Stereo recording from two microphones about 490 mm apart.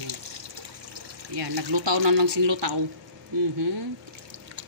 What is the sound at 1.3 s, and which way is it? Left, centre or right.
Speech, right.